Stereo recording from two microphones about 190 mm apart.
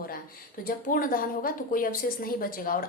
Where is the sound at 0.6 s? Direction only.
50° left (ahead or behind).